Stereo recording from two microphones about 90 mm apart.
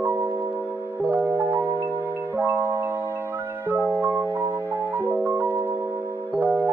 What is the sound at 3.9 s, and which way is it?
Music, 20° right (ahead or behind).